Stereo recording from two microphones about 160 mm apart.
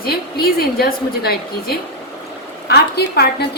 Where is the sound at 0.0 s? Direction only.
75° left (ahead or behind).